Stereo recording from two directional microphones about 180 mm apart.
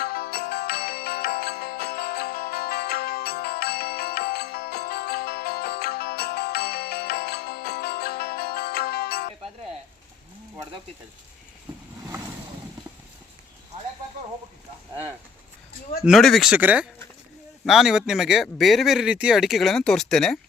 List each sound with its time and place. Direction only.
0.0 s music: 60° left (ahead or behind)
12.0 s boat: 15° right (ahead or behind)
16.0 s speech: centre (ahead or behind)